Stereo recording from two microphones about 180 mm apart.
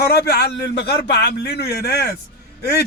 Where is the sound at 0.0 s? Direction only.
60° left (ahead or behind).